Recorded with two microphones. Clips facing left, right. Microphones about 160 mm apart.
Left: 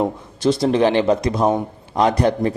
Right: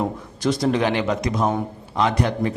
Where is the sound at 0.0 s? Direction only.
30° left (ahead or behind).